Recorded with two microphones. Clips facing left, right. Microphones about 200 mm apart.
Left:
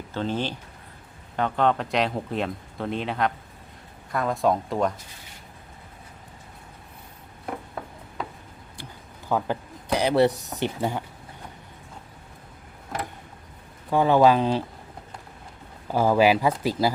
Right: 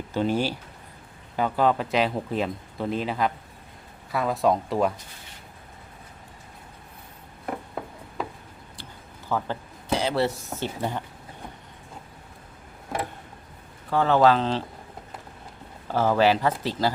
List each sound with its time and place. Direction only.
0.1 s speech: 10° right (ahead or behind)
9.3 s a sound: 15° left (ahead or behind)
10.5 s speech: 15° left (ahead or behind)
13.9 s speech: 15° left (ahead or behind)
15.9 s speech: 10° left (ahead or behind)